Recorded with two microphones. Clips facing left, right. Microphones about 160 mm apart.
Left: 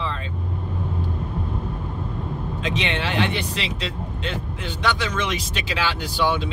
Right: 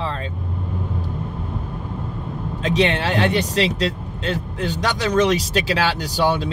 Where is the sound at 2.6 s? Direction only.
40° right (ahead or behind).